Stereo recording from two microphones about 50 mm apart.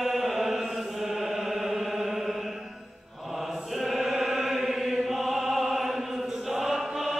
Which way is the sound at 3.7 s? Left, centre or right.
Centre.